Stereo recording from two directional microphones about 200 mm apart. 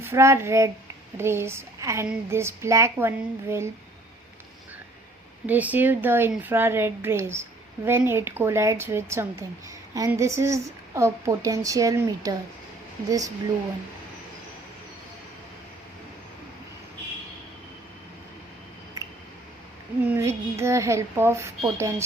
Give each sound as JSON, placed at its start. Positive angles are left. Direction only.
{"t": 0.0, "sound": "a woman's voice", "side_deg": -15}
{"t": 5.5, "sound": "a woman's voice", "side_deg": -10}
{"t": 20.1, "sound": "a woman's voice", "side_deg": -15}